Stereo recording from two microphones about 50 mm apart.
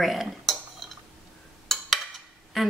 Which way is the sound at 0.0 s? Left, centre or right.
Centre.